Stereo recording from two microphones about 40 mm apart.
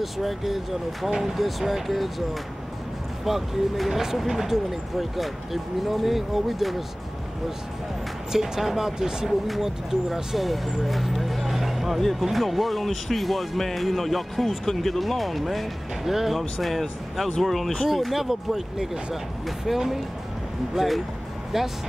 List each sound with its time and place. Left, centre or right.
0.0 s speech: centre
3.3 s speech: centre
8.3 s speech: centre
17.4 s speech: centre
21.5 s speech: centre